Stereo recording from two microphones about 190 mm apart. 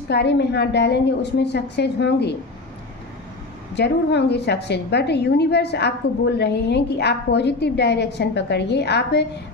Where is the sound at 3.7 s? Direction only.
65° left (ahead or behind).